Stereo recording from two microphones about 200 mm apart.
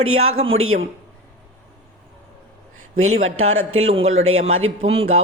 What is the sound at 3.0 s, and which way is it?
Speech, 35° right (ahead or behind).